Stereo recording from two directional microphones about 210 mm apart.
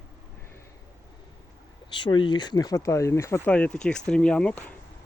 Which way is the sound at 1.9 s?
20° left (ahead or behind).